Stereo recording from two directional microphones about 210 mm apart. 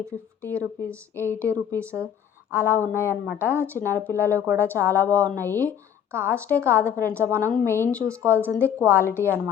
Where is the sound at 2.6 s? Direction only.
10° left (ahead or behind).